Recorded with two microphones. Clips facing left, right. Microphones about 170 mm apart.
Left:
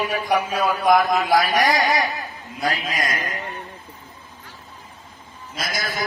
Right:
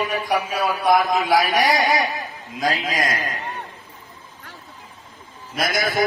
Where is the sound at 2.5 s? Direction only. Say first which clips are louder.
Right 2 dB; 90° right.